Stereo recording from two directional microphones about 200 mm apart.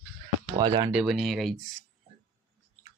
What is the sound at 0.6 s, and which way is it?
Speech, 20° right (ahead or behind).